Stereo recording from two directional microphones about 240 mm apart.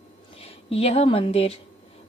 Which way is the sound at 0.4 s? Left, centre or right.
Left.